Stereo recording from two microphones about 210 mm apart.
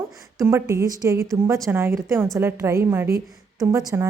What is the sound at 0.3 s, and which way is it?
Speech, 15° right (ahead or behind).